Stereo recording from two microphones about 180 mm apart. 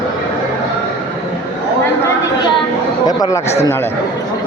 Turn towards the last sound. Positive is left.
turn(degrees=15)  # may be behind; listen again after turning